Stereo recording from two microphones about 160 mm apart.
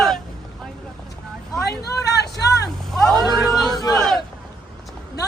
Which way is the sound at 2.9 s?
Centre (ahead or behind).